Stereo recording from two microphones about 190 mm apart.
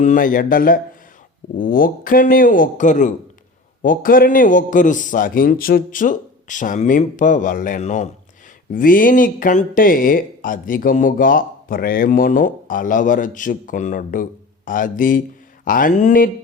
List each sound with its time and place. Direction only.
0.0 s speech: 45° left (ahead or behind)